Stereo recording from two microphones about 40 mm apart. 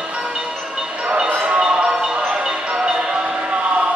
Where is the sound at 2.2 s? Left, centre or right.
Right.